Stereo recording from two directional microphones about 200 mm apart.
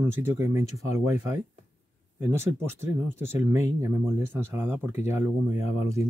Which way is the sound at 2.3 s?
15° right (ahead or behind).